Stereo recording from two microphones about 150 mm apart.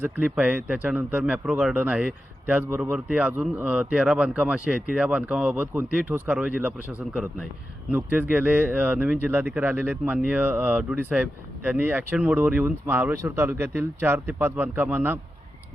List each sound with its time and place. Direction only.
0.0 s a man's voice: 10° right (ahead or behind)